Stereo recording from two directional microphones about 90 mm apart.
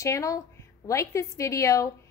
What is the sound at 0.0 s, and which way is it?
A woman's voice, 35° left (ahead or behind).